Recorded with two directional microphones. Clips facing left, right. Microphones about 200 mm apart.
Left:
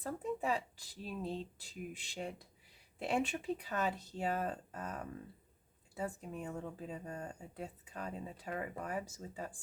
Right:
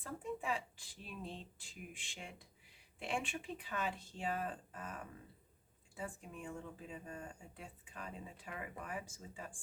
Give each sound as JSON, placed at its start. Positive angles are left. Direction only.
{"t": 0.0, "sound": "speech", "side_deg": 40}